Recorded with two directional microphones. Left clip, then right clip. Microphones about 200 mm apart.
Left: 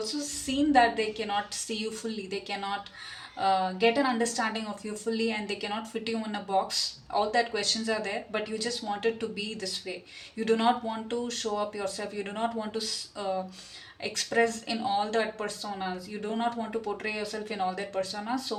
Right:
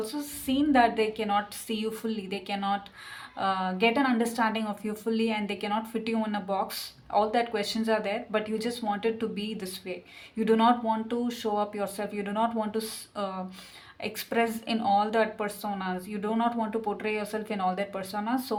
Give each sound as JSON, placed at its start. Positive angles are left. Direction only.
{"t": 0.0, "sound": "speech", "side_deg": -25}